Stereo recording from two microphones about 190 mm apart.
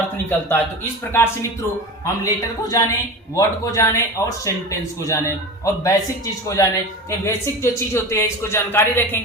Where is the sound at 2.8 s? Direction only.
20° left (ahead or behind).